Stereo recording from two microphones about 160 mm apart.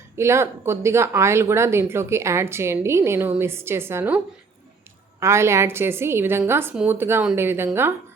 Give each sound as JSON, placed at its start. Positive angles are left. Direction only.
{"t": 0.2, "sound": "speech", "side_deg": -15}
{"t": 5.2, "sound": "speech", "side_deg": -15}